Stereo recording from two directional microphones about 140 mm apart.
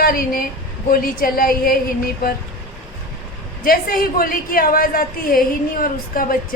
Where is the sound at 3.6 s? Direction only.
90° left.